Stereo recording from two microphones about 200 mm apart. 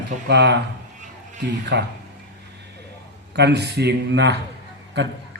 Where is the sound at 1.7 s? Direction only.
60° right (ahead or behind).